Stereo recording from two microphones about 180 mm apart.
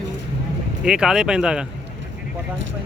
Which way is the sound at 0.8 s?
5° right (ahead or behind).